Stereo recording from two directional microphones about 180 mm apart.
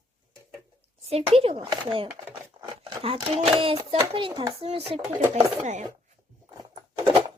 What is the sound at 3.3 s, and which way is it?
A child's voice, 30° right (ahead or behind).